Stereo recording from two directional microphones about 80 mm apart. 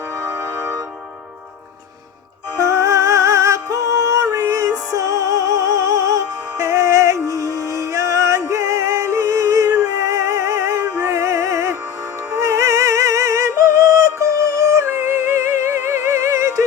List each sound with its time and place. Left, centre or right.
2.6 s music: right